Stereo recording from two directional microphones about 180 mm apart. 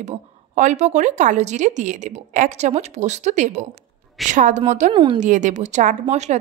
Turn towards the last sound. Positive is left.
turn(degrees=-40)  # may be behind; listen again after turning